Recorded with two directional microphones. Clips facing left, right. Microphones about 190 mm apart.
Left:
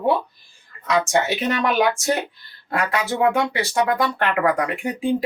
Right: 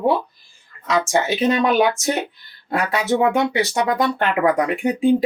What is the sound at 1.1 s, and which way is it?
Speech, 25° right (ahead or behind).